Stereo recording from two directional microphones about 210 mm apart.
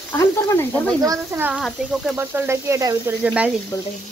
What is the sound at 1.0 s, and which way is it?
Speech, 10° right (ahead or behind).